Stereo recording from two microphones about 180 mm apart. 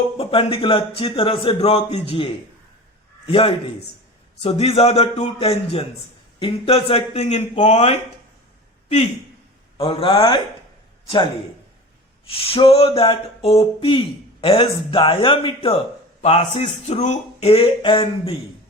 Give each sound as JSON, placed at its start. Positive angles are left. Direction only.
{"t": 0.2, "sound": "speech", "side_deg": 30}
{"t": 9.7, "sound": "a man's voice", "side_deg": 30}
{"t": 12.2, "sound": "a man's voice", "side_deg": 30}